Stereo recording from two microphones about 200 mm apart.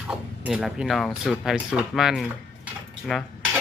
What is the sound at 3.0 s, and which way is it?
Cutlery, centre (ahead or behind).